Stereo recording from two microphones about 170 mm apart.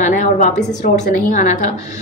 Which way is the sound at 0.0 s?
45° left (ahead or behind).